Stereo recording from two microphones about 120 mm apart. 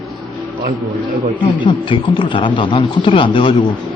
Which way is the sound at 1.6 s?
45° left (ahead or behind).